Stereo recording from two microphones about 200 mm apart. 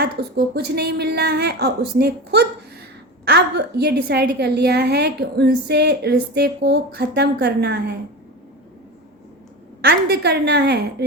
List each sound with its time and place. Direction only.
0.0 s a woman's voice: 55° right (ahead or behind)
9.8 s a woman's voice: 55° right (ahead or behind)